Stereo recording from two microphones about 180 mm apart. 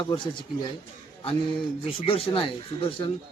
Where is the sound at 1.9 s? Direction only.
30° left (ahead or behind).